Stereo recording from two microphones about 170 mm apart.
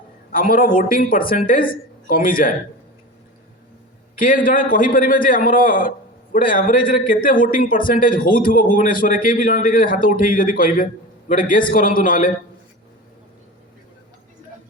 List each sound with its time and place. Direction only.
0.3 s a man's voice: 55° left (ahead or behind)
4.2 s a man's voice: 55° left (ahead or behind)